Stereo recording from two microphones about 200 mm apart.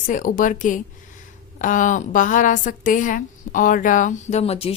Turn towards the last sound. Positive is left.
turn(degrees=30)  # may be behind; listen again after turning